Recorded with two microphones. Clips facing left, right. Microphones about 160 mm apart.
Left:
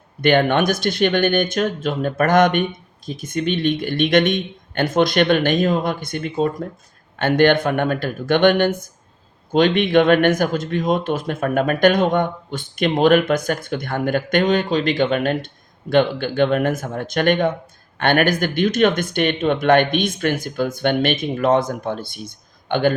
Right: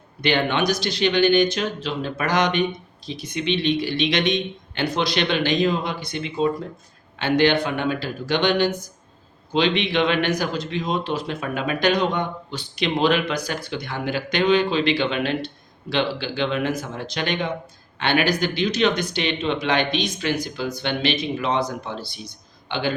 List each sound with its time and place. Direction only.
0.2 s speech: 50° left (ahead or behind)